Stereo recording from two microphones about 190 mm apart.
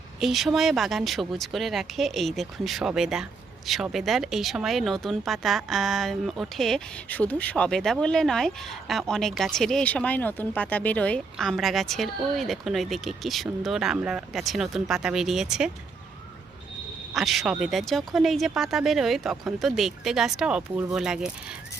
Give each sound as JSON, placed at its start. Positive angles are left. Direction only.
{"t": 0.2, "sound": "speech", "side_deg": 0}
{"t": 17.2, "sound": "speech", "side_deg": 0}